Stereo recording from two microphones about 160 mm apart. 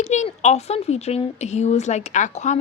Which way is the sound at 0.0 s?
45° left (ahead or behind).